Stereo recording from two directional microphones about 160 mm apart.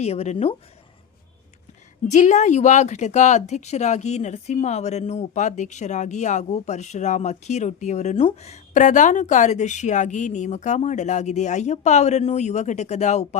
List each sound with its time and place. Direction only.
0.0 s speech: 40° left (ahead or behind)
2.0 s speech: 45° left (ahead or behind)